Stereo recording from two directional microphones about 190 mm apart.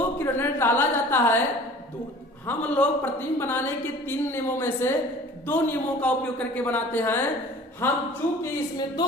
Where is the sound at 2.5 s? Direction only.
5° left (ahead or behind).